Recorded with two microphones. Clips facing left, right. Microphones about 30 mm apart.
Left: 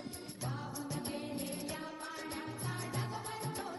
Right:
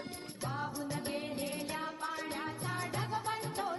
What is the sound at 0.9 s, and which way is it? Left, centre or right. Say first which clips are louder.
Music: right 3 dB; right.